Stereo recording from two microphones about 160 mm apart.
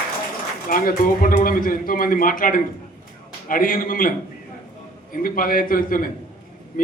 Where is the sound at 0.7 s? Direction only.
60° left (ahead or behind).